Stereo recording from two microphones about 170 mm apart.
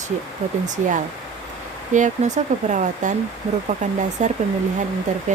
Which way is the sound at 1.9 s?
45° right (ahead or behind).